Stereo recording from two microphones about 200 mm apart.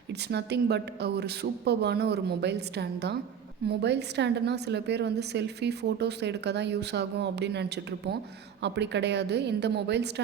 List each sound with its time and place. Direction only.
0.1 s a woman's voice: 55° right (ahead or behind)